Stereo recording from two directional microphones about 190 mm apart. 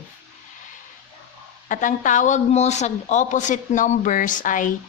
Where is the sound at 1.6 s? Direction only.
45° left (ahead or behind).